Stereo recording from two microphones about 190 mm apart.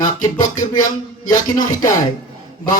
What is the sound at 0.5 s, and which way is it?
Speech, 40° left (ahead or behind).